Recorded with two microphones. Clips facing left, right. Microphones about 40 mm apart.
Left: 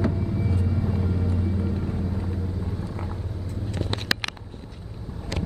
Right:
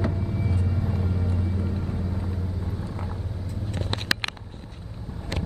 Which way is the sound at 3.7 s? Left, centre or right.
Right.